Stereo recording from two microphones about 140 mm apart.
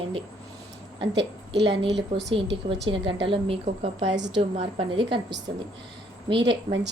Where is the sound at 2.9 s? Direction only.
40° right (ahead or behind).